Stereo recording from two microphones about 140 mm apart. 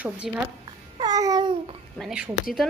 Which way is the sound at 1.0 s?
30° right (ahead or behind).